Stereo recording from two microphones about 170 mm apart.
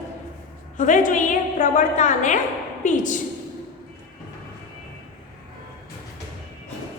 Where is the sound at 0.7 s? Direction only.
50° left (ahead or behind).